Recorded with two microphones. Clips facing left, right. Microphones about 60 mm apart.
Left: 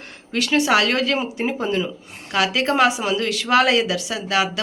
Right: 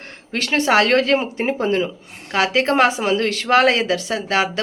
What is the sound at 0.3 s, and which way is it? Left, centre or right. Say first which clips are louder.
A woman's voice: right 1 dB; right.